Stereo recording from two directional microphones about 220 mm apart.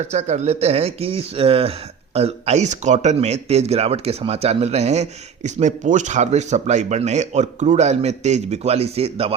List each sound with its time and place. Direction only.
0.1 s speech: 30° right (ahead or behind)